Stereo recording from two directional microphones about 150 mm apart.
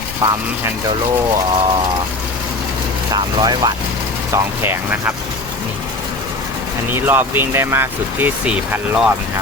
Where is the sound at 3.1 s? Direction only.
30° right (ahead or behind).